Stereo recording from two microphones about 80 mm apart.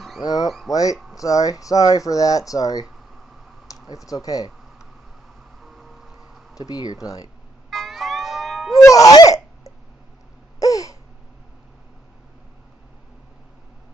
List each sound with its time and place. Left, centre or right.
0.2 s speech: left
3.7 s a sound: left
4.1 s speech: left
5.6 s vehicle: centre
6.5 s speech: left
7.7 s music: centre
8.8 s sneeze: left
10.6 s a sound: left